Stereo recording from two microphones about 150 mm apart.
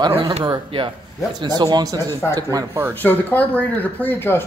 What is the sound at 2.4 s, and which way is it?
Speech, 25° right (ahead or behind).